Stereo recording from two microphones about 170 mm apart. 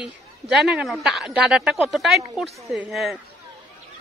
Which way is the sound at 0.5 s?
5° right (ahead or behind).